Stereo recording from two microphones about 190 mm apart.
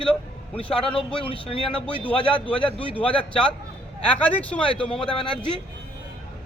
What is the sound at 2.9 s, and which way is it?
Speech, 5° left (ahead or behind).